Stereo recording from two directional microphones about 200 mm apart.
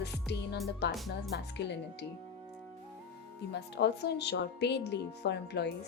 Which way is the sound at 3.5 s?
55° left (ahead or behind).